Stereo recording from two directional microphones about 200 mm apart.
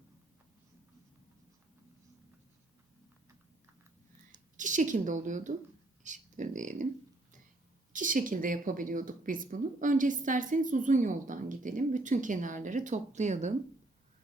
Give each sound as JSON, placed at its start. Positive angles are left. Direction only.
{"t": 4.5, "sound": "a woman's voice", "side_deg": -40}
{"t": 7.9, "sound": "speech", "side_deg": -40}